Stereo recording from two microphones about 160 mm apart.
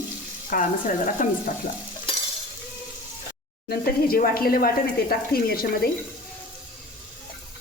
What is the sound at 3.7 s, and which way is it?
Speech, 65° left (ahead or behind).